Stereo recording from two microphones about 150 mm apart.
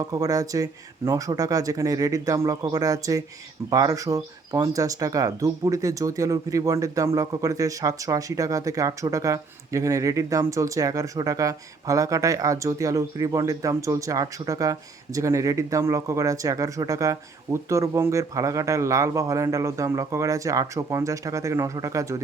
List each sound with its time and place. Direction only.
0.0 s speech: 25° right (ahead or behind)